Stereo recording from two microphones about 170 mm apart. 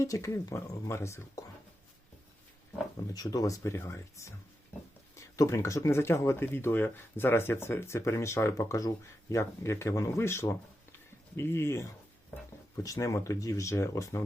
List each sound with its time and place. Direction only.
0.0 s speech: 20° left (ahead or behind)
3.1 s speech: 20° left (ahead or behind)